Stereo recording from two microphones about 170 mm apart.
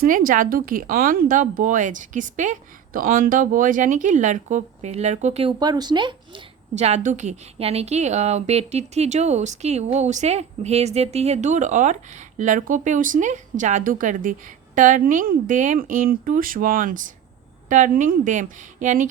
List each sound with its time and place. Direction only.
0.0 s speech: 55° right (ahead or behind); by 6.4 s 25° right (ahead or behind)
6.7 s a woman's voice: 40° right (ahead or behind)